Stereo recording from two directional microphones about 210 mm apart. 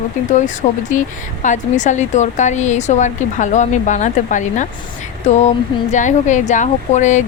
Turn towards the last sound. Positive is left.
turn(degrees=35)  # may be behind; listen again after turning